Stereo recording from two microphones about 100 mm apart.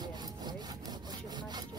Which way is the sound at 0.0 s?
45° right (ahead or behind).